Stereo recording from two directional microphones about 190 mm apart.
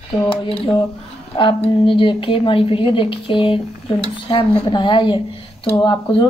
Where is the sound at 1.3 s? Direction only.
25° left (ahead or behind).